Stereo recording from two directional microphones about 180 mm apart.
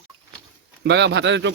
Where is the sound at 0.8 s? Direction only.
70° right (ahead or behind).